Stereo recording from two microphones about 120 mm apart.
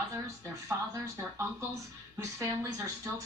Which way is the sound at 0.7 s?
20° right (ahead or behind).